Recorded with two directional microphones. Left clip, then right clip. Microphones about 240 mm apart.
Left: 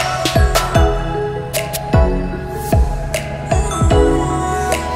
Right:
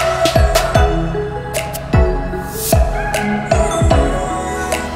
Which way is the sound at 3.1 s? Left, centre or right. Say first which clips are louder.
Right 2 dB; centre.